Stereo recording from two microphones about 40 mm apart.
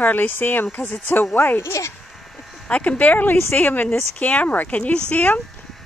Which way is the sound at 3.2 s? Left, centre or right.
Left.